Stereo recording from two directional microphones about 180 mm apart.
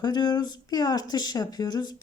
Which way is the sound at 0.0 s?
25° left (ahead or behind).